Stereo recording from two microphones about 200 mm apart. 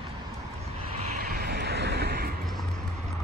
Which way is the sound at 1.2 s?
50° right (ahead or behind).